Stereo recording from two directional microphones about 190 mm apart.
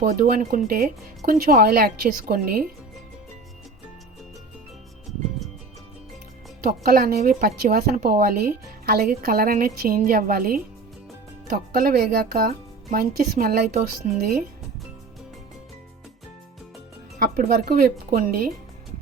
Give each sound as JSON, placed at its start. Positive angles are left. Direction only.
{"t": 0.0, "sound": "a woman's voice", "side_deg": -50}
{"t": 6.7, "sound": "a woman's voice", "side_deg": -50}
{"t": 17.2, "sound": "a woman's voice", "side_deg": -50}